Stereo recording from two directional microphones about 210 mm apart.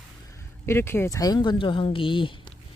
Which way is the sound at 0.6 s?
10° left (ahead or behind).